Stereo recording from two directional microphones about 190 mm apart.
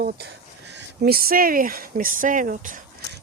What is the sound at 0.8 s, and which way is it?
Speech, 55° right (ahead or behind).